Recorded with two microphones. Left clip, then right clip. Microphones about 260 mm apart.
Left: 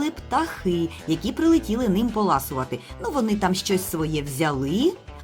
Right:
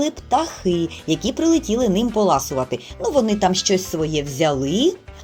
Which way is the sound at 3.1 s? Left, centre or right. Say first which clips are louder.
Right 6 dB; left.